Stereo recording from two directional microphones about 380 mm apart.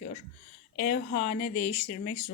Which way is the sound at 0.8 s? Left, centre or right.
Left.